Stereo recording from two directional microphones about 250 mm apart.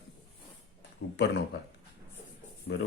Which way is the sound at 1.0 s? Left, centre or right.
Left.